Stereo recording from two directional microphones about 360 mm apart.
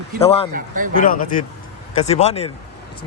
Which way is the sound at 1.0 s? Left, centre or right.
Left.